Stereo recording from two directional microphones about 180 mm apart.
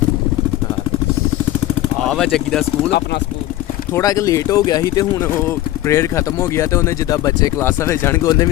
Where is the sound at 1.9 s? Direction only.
5° left (ahead or behind).